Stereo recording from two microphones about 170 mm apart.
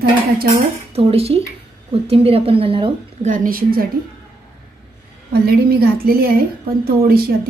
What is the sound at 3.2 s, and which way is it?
Speech, 50° right (ahead or behind).